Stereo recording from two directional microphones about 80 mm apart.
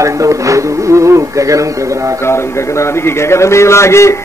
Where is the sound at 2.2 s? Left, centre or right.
Left.